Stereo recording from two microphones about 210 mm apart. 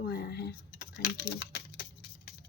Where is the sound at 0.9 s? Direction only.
50° left (ahead or behind).